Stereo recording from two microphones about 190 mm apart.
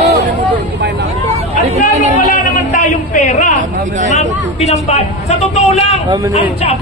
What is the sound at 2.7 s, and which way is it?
Speech, 40° left (ahead or behind).